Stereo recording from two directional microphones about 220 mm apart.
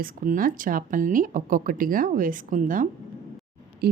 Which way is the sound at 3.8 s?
45° right (ahead or behind).